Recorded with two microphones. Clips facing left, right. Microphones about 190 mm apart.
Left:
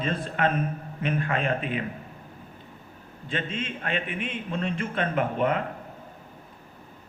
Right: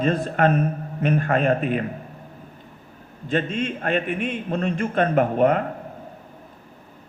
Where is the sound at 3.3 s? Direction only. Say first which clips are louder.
Right 8 dB; 45° right (ahead or behind).